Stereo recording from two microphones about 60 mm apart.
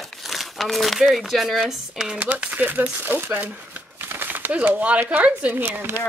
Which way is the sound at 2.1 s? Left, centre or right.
Right.